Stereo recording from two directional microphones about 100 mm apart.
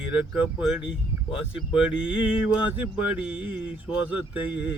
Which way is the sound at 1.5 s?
10° right (ahead or behind).